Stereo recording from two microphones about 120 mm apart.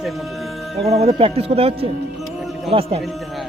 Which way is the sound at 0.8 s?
60° right (ahead or behind).